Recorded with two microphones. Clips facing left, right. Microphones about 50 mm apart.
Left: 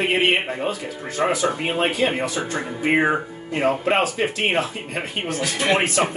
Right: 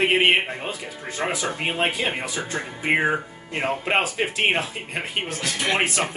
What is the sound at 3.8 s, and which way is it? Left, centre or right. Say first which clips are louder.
Speech: left 3 dB; centre.